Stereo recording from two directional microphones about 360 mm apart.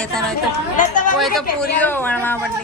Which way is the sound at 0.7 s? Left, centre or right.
Left.